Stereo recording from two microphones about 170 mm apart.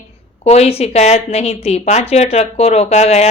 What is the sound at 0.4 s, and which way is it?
Speech, 40° left (ahead or behind).